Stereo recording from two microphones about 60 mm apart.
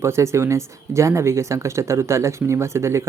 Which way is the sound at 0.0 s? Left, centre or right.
Right.